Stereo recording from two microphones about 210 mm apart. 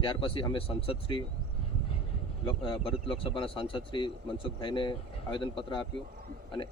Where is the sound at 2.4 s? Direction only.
25° left (ahead or behind).